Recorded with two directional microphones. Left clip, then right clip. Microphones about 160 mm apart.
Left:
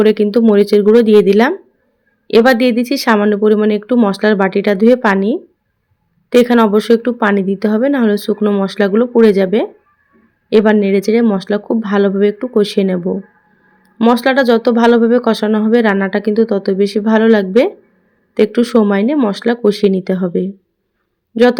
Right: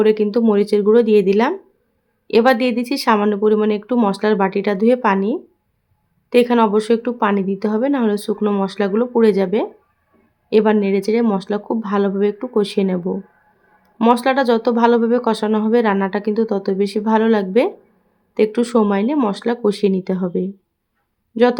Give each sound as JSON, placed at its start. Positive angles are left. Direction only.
{"t": 0.0, "sound": "speech", "side_deg": 20}